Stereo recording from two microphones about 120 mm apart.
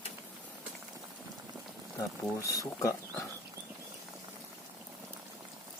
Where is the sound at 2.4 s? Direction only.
25° left (ahead or behind).